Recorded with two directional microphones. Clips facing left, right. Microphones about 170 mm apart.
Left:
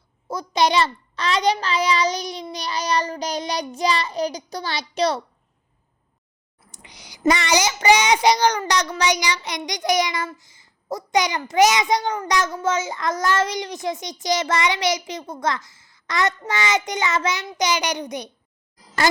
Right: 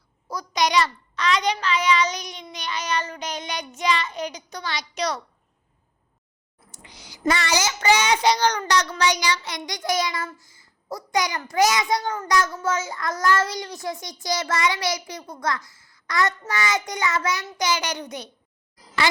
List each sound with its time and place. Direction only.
0.3 s a child's voice: 25° left (ahead or behind)
6.8 s child singing: 15° left (ahead or behind)
12.5 s a child's voice: 20° left (ahead or behind)